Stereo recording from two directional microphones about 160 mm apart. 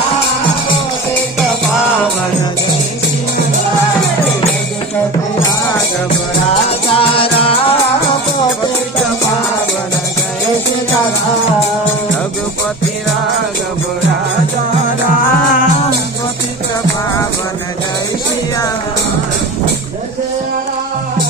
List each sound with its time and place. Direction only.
6.9 s music: 35° left (ahead or behind)